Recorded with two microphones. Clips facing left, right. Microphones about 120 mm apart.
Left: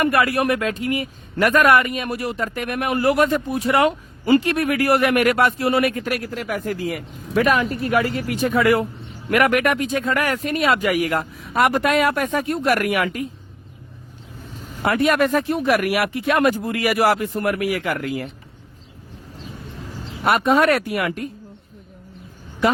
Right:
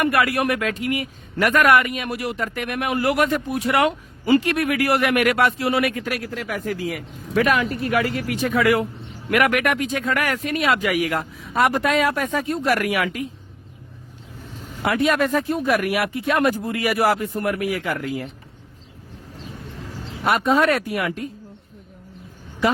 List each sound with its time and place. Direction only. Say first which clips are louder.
0.0 s speech: left 1 dB; 30° left (ahead or behind)
11.5 s speech: left 1 dB; 60° left (ahead or behind)
14.8 s speech: left 2 dB; 50° left (ahead or behind); by 18.3 s 65° left (ahead or behind)
20.2 s speech: left 2 dB; 60° left (ahead or behind)